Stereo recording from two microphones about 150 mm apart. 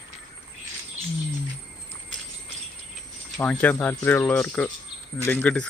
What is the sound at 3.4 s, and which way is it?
Speech, 10° left (ahead or behind).